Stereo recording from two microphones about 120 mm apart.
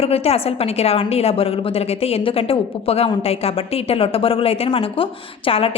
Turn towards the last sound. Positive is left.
turn(degrees=50)  # may be behind; listen again after turning